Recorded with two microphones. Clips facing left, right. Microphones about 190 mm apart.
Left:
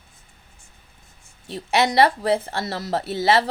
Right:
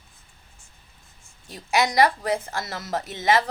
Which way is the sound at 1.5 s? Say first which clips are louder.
Left 3 dB; 30° left (ahead or behind).